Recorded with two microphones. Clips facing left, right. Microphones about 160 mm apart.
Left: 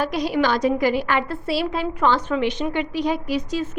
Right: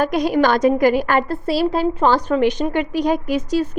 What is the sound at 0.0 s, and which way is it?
A woman's voice, 50° right (ahead or behind).